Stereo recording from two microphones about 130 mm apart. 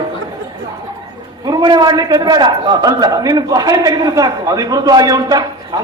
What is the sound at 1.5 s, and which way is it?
A man's voice, 35° right (ahead or behind).